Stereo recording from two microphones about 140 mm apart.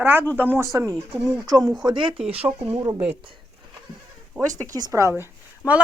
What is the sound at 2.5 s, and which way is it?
Speech, 20° right (ahead or behind).